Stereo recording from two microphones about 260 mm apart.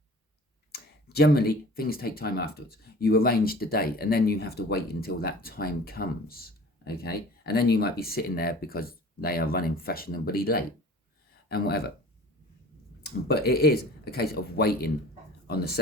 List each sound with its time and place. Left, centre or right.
0.7 s speech: left
13.0 s speech: left